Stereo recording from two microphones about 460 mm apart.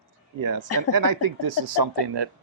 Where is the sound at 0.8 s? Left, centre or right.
Right.